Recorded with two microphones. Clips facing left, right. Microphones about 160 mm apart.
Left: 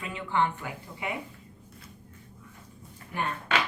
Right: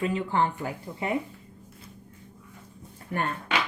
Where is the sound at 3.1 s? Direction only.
55° right (ahead or behind).